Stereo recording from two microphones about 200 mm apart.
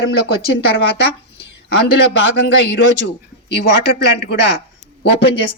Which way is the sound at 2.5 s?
60° left (ahead or behind).